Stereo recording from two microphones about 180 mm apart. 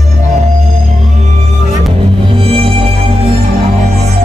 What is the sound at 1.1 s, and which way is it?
Music, 40° right (ahead or behind).